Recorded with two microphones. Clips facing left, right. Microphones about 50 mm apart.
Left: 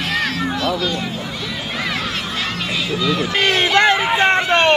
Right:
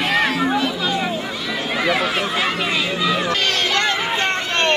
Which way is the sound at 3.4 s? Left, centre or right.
Centre.